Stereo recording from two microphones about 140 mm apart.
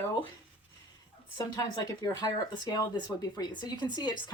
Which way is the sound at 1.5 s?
25° left (ahead or behind).